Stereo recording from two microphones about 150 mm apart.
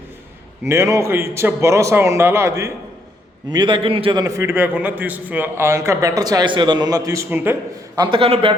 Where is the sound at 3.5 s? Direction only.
30° right (ahead or behind); by 7.5 s 15° right (ahead or behind).